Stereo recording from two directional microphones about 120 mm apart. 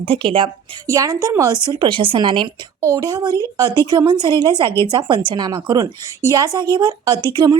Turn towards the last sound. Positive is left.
turn(degrees=-35)  # may be behind; listen again after turning